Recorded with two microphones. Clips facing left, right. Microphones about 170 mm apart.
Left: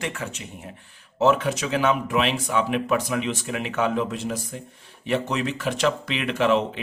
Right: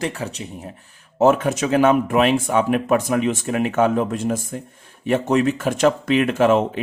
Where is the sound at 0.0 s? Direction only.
35° right (ahead or behind).